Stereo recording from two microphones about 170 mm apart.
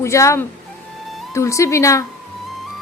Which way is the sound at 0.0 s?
15° left (ahead or behind).